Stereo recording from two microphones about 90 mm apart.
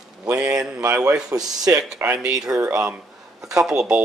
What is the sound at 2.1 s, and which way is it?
Speech, 10° right (ahead or behind).